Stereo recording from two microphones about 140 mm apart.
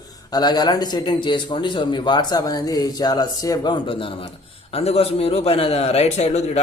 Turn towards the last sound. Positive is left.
turn(degrees=50)  # may be behind; listen again after turning